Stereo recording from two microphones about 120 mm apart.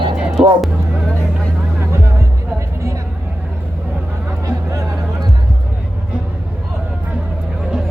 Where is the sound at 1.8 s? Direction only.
25° right (ahead or behind).